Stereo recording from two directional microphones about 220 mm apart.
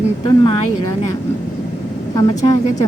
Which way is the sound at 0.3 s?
20° left (ahead or behind).